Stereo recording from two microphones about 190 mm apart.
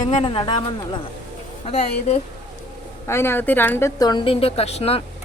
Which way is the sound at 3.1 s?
10° left (ahead or behind).